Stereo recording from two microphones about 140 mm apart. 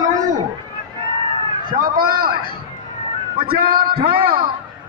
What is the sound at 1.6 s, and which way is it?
A man's voice, 85° right.